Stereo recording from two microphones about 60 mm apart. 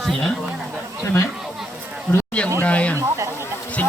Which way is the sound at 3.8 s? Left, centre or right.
Left.